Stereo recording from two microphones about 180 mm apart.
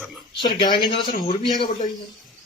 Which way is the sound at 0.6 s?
25° left (ahead or behind).